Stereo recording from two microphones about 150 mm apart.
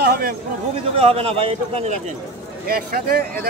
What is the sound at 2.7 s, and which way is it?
Speech, 80° right.